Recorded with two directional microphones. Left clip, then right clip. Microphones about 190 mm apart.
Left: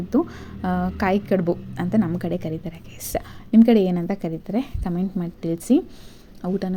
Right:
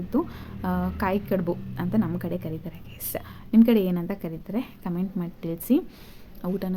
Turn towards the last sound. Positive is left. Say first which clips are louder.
# left 4 dB
turn(degrees=10)  # may be behind; listen again after turning